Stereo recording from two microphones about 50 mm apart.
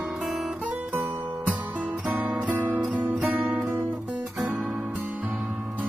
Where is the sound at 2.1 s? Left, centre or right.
Right.